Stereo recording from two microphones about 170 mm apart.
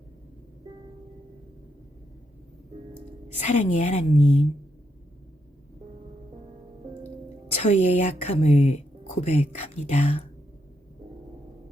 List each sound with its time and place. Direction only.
3.4 s a woman's voice: 45° left (ahead or behind)
7.6 s speech: 40° left (ahead or behind)